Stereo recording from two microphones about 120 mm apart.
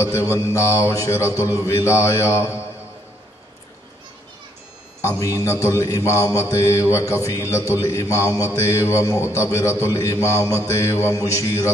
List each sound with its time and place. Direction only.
0.0 s mantra: 25° left (ahead or behind)
5.2 s mantra: 25° left (ahead or behind)